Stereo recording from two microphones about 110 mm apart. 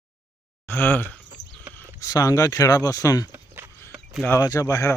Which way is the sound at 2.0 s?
35° left (ahead or behind).